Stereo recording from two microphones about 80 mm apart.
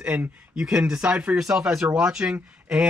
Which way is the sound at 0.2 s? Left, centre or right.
Centre.